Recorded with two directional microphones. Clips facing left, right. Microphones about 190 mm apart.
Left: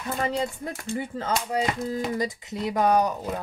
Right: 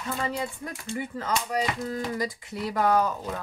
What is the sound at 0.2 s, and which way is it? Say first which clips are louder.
Speech: left 6 dB; 25° left (ahead or behind).